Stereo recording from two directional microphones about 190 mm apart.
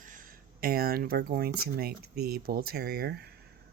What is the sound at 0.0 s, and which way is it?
Speech, 45° right (ahead or behind).